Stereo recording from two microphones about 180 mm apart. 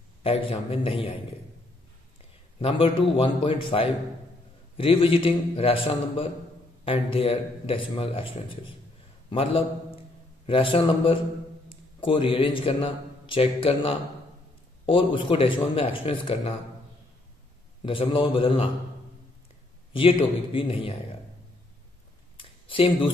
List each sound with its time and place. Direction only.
0.2 s a man's voice: 30° left (ahead or behind)
2.6 s a man's voice: 30° left (ahead or behind)
17.8 s a man's voice: 30° left (ahead or behind)
19.9 s a man's voice: 30° left (ahead or behind)
22.4 s a sound: 30° left (ahead or behind)